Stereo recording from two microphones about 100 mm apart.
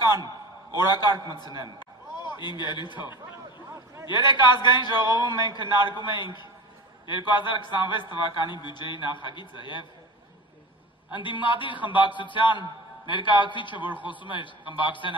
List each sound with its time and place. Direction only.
0.2 s a man's voice: 45° left (ahead or behind)
1.8 s a sound: 45° left (ahead or behind)
4.0 s a man's voice: 50° left (ahead or behind)
11.1 s a man's voice: 55° left (ahead or behind)